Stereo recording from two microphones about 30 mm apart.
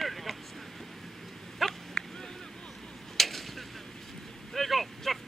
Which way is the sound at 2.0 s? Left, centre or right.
Left.